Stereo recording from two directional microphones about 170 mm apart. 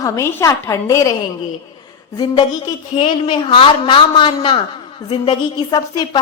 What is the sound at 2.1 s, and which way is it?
A woman's voice, 25° left (ahead or behind).